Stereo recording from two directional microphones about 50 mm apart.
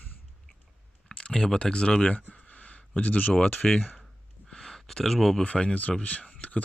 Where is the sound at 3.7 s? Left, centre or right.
Left.